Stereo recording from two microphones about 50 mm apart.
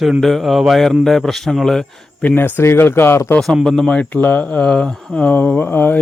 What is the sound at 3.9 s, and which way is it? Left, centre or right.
Speech, left.